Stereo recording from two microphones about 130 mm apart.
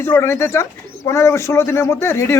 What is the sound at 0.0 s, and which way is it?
Speech, 20° left (ahead or behind).